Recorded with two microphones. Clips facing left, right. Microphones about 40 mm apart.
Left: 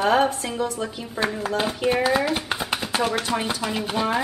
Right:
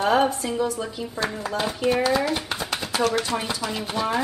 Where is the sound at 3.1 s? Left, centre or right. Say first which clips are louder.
Even; centre.